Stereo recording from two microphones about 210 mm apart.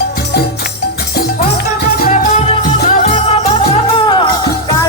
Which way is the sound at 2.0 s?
40° left (ahead or behind).